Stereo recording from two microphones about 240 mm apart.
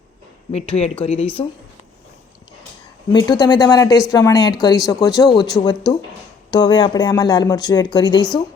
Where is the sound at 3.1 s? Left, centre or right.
Centre.